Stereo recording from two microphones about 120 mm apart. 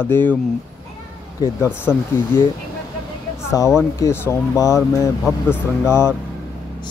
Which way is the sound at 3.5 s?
25° left (ahead or behind).